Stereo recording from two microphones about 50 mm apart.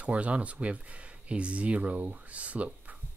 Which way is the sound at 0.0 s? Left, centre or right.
Right.